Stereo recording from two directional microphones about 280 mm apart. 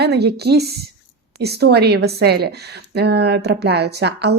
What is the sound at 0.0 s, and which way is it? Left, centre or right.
A woman's voice, right.